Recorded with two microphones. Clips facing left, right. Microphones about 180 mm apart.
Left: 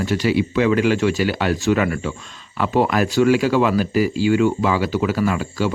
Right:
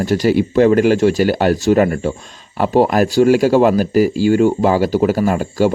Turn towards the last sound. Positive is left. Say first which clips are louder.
# right 5 dB
turn(degrees=-45)  # may be behind; listen again after turning